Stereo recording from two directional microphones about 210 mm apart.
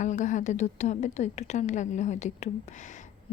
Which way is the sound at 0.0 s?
35° left (ahead or behind).